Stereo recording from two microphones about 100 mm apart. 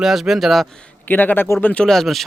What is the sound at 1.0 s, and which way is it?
Speech, 20° left (ahead or behind).